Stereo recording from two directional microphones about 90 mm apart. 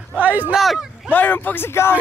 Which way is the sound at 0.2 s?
20° right (ahead or behind).